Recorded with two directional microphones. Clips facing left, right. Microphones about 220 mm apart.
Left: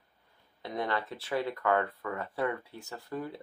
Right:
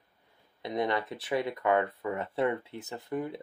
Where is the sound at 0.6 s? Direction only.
20° right (ahead or behind).